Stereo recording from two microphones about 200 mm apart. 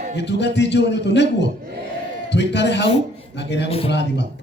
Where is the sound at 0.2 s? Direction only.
60° left (ahead or behind).